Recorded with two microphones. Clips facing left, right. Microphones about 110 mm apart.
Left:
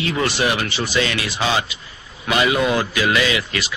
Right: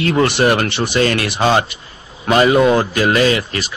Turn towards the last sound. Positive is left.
turn(degrees=-45)  # may be behind; listen again after turning